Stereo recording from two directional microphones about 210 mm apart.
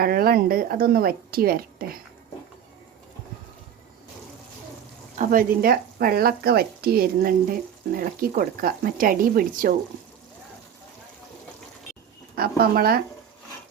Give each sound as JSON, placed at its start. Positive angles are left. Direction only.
{"t": 0.0, "sound": "speech", "side_deg": -45}
{"t": 5.1, "sound": "speech", "side_deg": -40}
{"t": 12.4, "sound": "speech", "side_deg": -45}